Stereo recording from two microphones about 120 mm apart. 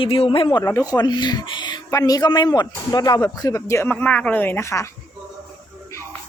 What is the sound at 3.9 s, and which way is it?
Speech, 10° left (ahead or behind).